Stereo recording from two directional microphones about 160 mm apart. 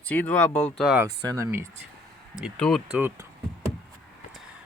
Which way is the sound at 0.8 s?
10° right (ahead or behind).